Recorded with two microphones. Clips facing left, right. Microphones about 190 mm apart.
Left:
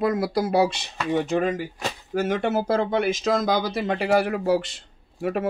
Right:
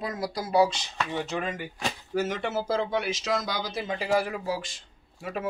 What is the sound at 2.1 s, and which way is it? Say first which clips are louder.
Speech: left 6 dB; 55° left (ahead or behind).